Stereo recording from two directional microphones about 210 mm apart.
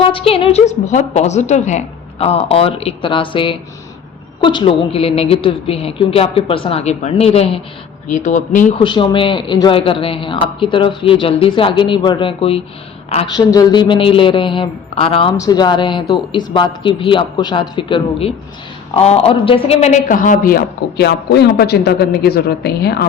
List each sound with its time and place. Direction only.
0.0 s a woman's voice: 25° left (ahead or behind)
8.7 s a woman's voice: 20° left (ahead or behind); by 23.0 s 50° left (ahead or behind)